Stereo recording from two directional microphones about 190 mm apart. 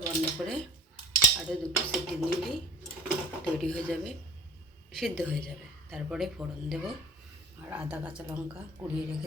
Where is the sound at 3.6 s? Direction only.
5° left (ahead or behind).